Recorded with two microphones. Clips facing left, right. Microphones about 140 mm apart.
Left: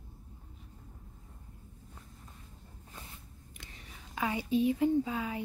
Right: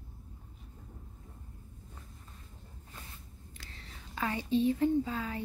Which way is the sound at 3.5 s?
15° left (ahead or behind).